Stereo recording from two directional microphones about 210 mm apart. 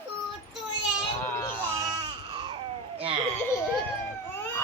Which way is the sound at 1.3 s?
10° left (ahead or behind).